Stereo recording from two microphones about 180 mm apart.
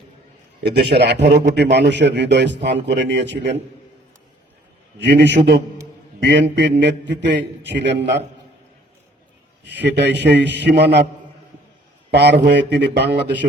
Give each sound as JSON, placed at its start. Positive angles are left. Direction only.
{"t": 0.6, "sound": "a man's voice", "side_deg": -65}
{"t": 4.9, "sound": "a man's voice", "side_deg": -75}
{"t": 6.6, "sound": "a man's voice", "side_deg": -75}
{"t": 9.6, "sound": "a man's voice", "side_deg": -70}
{"t": 12.1, "sound": "a man's voice", "side_deg": -70}